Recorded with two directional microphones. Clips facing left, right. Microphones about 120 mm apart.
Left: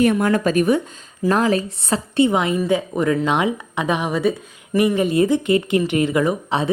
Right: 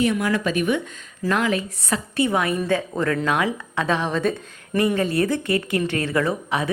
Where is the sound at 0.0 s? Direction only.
45° left (ahead or behind); by 4.9 s 5° left (ahead or behind).